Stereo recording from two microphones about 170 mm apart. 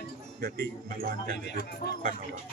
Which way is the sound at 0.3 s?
60° right (ahead or behind).